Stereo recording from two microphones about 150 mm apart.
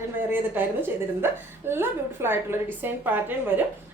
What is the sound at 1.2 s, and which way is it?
A woman's voice, 15° right (ahead or behind).